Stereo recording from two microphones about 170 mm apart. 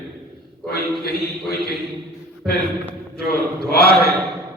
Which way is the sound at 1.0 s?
65° left (ahead or behind).